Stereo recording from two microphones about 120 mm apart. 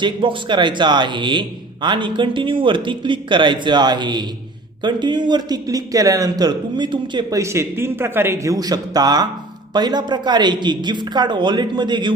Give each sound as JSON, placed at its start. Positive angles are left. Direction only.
{"t": 0.0, "sound": "a man's voice", "side_deg": -45}
{"t": 7.3, "sound": "a man's voice", "side_deg": -25}